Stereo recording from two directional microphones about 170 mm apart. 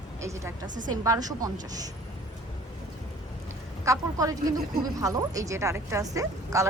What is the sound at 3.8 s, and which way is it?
Speech, 20° right (ahead or behind).